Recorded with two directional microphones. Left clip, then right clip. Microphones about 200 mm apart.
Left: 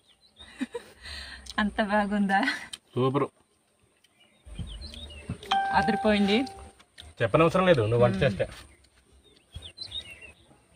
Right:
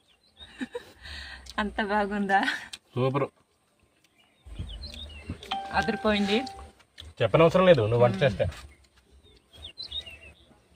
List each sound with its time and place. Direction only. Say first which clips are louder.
0.5 s a sound: left 1 dB; 20° left (ahead or behind)
1.5 s speech: left 1 dB; 15° left (ahead or behind)
2.9 s a man's voice: left 1 dB; 10° right (ahead or behind)
5.7 s speech: right 2 dB; 15° left (ahead or behind)
6.9 s a man's voice: right 1 dB; 10° right (ahead or behind)